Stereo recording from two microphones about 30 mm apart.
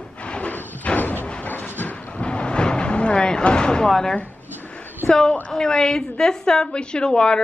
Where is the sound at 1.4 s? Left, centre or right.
Left.